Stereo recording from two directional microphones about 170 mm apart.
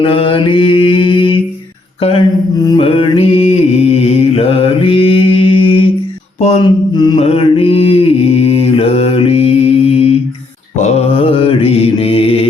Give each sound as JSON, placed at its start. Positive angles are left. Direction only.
{"t": 0.0, "sound": "mantra", "side_deg": 30}
{"t": 2.0, "sound": "a sound", "side_deg": 35}
{"t": 2.6, "sound": "mantra", "side_deg": 35}
{"t": 6.9, "sound": "mantra", "side_deg": 25}